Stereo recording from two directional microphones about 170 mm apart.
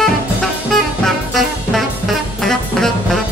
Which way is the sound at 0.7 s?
Centre (ahead or behind).